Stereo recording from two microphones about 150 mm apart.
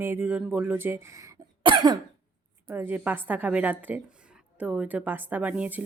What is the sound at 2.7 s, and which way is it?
Speech, 15° right (ahead or behind).